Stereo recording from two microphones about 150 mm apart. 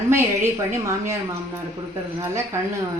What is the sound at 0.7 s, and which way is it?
Speech, 20° right (ahead or behind).